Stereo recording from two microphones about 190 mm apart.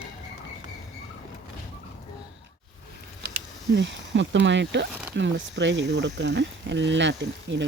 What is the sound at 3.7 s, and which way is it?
Speech, 70° right (ahead or behind).